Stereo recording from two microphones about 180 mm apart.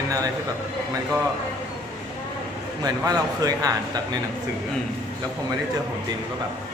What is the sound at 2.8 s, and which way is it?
A man's voice, 20° right (ahead or behind).